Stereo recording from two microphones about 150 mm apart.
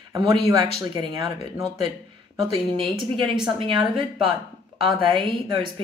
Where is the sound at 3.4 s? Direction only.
30° right (ahead or behind).